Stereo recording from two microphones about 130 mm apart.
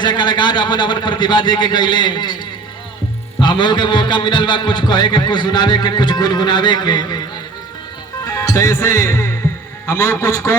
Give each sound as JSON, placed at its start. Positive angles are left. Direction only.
{"t": 0.0, "sound": "a man's voice", "side_deg": 35}
{"t": 3.4, "sound": "a man's voice", "side_deg": 35}
{"t": 8.4, "sound": "music", "side_deg": 20}
{"t": 9.8, "sound": "a man's voice", "side_deg": 20}